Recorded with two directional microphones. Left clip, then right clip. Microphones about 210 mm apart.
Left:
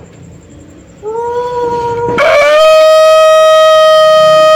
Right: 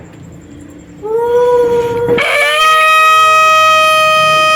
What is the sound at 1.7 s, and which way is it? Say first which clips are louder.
Shofar: right 1 dB; 20° left (ahead or behind).